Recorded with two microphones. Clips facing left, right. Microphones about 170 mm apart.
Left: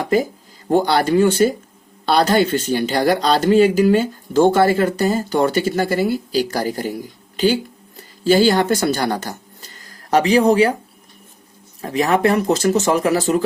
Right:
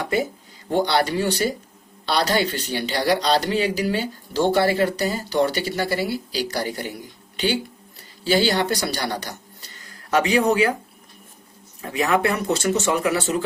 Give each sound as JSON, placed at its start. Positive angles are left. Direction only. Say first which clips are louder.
{"t": 0.0, "sound": "speech", "louder": "left 5 dB", "side_deg": 40}
{"t": 11.8, "sound": "speech", "louder": "left 4 dB", "side_deg": 35}